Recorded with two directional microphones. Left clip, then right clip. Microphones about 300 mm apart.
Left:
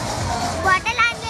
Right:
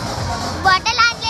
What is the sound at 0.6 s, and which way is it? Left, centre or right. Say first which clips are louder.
Music: right 4 dB; right.